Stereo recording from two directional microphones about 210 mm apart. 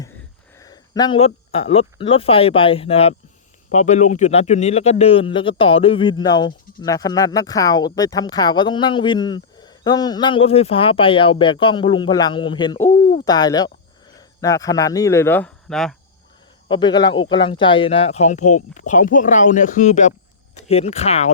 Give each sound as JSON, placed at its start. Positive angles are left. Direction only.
{"t": 0.6, "sound": "a sound", "side_deg": 20}
{"t": 2.0, "sound": "speech", "side_deg": 25}
{"t": 13.0, "sound": "hoot", "side_deg": 40}
{"t": 13.2, "sound": "speech", "side_deg": 20}
{"t": 16.6, "sound": "speech", "side_deg": 20}